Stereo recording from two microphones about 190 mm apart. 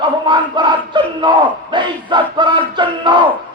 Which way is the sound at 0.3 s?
25° right (ahead or behind).